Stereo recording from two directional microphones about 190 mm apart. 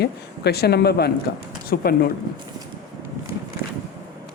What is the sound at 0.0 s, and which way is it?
A man's voice, 55° left (ahead or behind).